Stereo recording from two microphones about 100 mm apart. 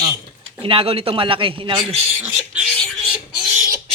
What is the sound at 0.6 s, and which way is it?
Speech, 65° right (ahead or behind).